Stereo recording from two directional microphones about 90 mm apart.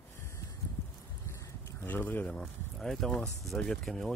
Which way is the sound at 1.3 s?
25° left (ahead or behind).